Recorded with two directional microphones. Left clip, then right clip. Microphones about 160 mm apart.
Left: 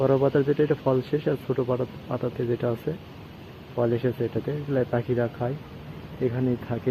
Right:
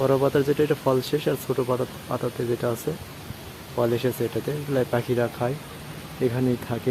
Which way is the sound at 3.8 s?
15° right (ahead or behind).